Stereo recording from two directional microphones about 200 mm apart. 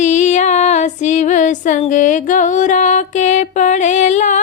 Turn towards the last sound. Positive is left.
turn(degrees=35)  # may be behind; listen again after turning